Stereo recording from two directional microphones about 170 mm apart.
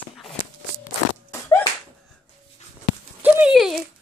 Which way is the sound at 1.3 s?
15° left (ahead or behind).